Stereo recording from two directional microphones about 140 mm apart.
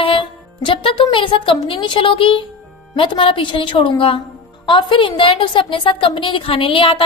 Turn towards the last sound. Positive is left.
turn(degrees=40)  # may be behind; listen again after turning